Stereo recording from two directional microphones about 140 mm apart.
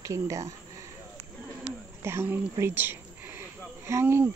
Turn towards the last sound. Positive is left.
turn(degrees=-15)  # may be behind; listen again after turning